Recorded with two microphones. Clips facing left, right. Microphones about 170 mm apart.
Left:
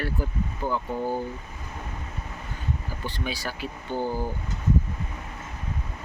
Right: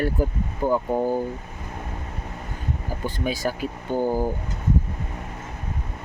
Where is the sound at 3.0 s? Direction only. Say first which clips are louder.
Right 7 dB; 45° right (ahead or behind).